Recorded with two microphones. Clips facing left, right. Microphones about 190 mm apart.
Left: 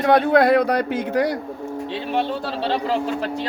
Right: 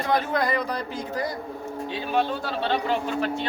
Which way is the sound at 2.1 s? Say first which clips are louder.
Left 1 dB; 30° left (ahead or behind).